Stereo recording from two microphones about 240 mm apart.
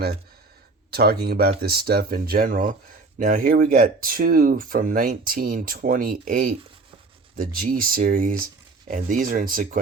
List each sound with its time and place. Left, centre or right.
0.9 s speech: right